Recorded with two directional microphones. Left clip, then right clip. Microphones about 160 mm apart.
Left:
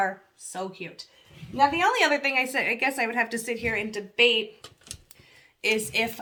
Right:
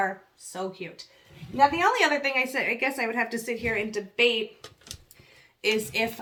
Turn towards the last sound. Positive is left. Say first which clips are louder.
# left 1 dB
turn(degrees=45)  # may be behind; listen again after turning